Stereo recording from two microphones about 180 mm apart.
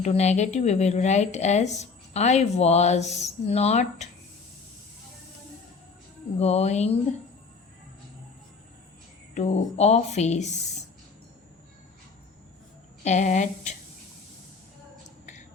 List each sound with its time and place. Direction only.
0.0 s a woman's voice: 40° left (ahead or behind)
6.4 s a woman's voice: 35° left (ahead or behind)
9.3 s a woman's voice: 40° left (ahead or behind)
13.1 s a woman's voice: 40° left (ahead or behind)